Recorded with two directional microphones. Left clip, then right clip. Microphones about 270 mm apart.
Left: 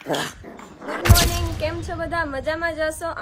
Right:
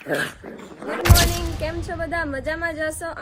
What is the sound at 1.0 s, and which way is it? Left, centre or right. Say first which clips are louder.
Speech: even; centre.